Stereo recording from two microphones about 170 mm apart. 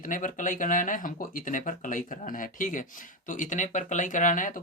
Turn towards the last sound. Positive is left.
turn(degrees=50)  # may be behind; listen again after turning